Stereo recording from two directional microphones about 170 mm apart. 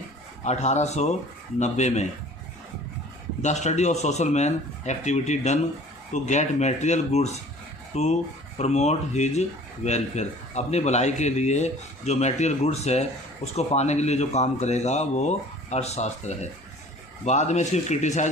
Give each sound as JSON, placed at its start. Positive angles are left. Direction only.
{"t": 0.4, "sound": "speech", "side_deg": 40}
{"t": 3.4, "sound": "speech", "side_deg": 45}